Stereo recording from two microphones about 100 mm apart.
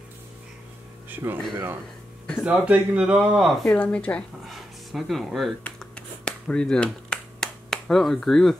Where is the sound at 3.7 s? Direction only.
15° left (ahead or behind).